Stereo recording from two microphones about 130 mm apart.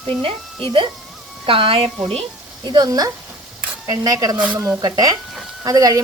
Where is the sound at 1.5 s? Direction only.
45° right (ahead or behind).